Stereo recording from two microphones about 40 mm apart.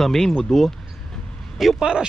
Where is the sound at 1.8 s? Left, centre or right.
Right.